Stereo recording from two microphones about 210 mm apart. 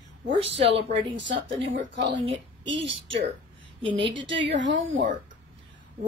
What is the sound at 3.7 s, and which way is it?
Speech, 25° right (ahead or behind).